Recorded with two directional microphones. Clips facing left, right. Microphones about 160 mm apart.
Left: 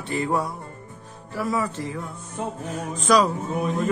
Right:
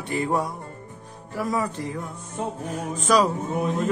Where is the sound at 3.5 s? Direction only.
25° right (ahead or behind).